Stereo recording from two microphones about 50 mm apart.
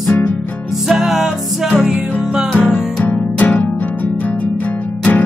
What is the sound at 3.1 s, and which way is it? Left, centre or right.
Music, left.